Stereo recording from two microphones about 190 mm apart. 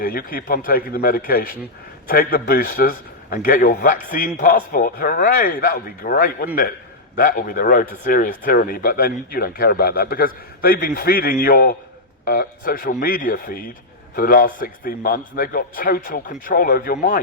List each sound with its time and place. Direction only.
0.0 s a man's voice: 50° left (ahead or behind)